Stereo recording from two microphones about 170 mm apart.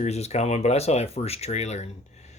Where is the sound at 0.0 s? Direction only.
40° left (ahead or behind).